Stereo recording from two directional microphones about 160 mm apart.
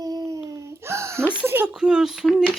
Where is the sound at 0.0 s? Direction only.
25° right (ahead or behind).